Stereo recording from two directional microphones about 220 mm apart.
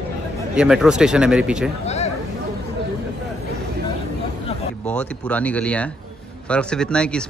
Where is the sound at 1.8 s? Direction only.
30° left (ahead or behind).